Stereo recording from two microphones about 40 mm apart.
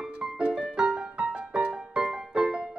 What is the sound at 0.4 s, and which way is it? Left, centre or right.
Music, right.